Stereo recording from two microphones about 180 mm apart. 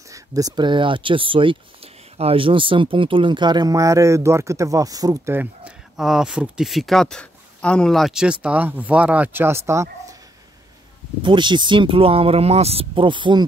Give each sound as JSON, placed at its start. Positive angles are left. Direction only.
{"t": 0.1, "sound": "speech", "side_deg": -20}
{"t": 5.9, "sound": "a man's voice", "side_deg": 0}
{"t": 11.2, "sound": "speech", "side_deg": -25}